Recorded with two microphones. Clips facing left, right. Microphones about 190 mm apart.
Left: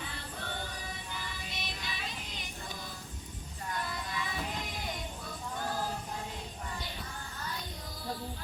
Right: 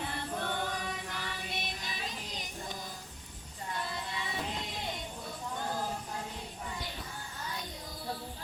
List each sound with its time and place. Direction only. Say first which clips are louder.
0.0 s music: right 6 dB; 55° right (ahead or behind); by 2.5 s 40° right (ahead or behind)
3.7 s music: even; 25° right (ahead or behind)